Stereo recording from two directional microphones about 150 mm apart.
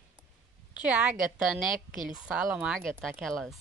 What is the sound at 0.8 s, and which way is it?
Speech, 5° right (ahead or behind).